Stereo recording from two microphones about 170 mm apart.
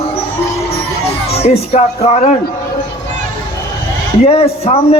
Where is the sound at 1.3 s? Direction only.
35° left (ahead or behind).